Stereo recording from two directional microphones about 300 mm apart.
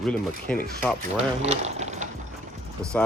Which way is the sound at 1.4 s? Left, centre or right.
Right.